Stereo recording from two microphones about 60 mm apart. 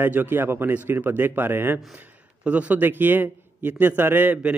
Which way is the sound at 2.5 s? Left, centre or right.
Right.